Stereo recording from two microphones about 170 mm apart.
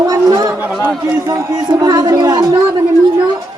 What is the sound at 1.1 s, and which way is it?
A man's voice, 15° right (ahead or behind).